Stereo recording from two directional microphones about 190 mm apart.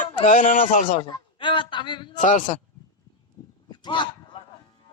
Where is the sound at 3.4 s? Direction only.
20° left (ahead or behind).